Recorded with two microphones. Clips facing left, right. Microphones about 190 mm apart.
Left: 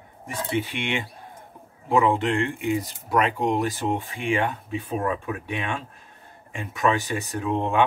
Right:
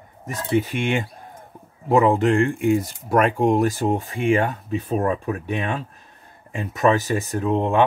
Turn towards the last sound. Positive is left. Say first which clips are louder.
# right 4 dB
turn(degrees=-40)  # may be behind; listen again after turning